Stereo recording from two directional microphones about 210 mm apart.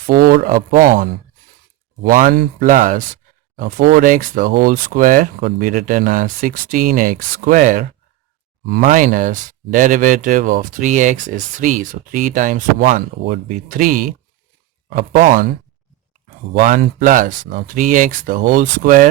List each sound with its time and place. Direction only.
0.1 s speech: 45° right (ahead or behind)
16.6 s speech: 35° right (ahead or behind)